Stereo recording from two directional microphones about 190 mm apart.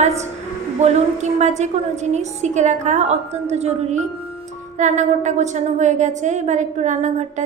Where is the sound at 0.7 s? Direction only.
35° right (ahead or behind).